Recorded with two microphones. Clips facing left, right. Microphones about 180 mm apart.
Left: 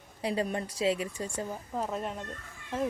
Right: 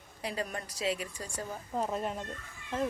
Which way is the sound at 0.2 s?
30° left (ahead or behind).